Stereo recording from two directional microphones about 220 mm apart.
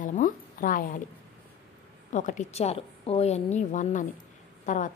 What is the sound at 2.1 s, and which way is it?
A woman's voice, 35° left (ahead or behind).